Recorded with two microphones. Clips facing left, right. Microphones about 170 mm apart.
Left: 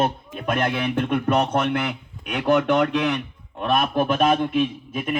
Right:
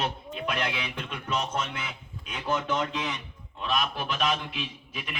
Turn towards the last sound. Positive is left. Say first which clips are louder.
# left 14 dB
turn(degrees=50)  # may be behind; listen again after turning